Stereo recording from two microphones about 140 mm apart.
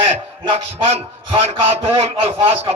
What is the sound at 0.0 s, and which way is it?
A man's voice, 40° right (ahead or behind).